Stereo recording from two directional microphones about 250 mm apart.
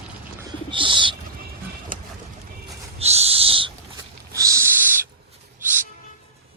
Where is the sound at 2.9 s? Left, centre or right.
Right; by 5.0 s centre.